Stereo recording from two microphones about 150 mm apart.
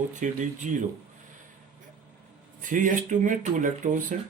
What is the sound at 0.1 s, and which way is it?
Speech, 55° right (ahead or behind).